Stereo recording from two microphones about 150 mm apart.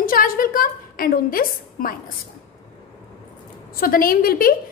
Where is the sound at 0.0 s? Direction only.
70° left (ahead or behind).